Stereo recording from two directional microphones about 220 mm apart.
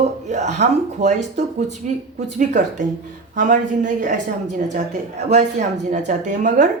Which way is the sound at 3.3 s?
35° right (ahead or behind).